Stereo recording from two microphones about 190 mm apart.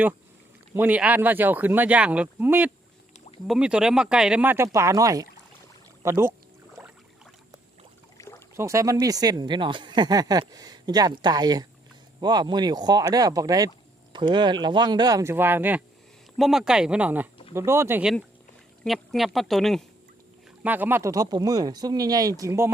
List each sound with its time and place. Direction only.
0.7 s speech: 10° right (ahead or behind)
6.8 s a sound: 5° right (ahead or behind)
8.2 s rowboat: 15° left (ahead or behind)
8.5 s speech: 15° right (ahead or behind)
18.9 s speech: centre (ahead or behind)
20.7 s speech: 10° right (ahead or behind)